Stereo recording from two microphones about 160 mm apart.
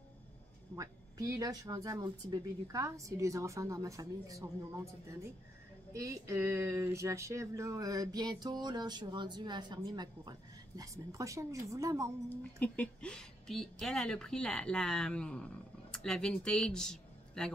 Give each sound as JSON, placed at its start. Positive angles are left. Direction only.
{"t": 0.7, "sound": "speech", "side_deg": -20}
{"t": 5.9, "sound": "speech", "side_deg": -20}
{"t": 12.3, "sound": "a woman's voice", "side_deg": 10}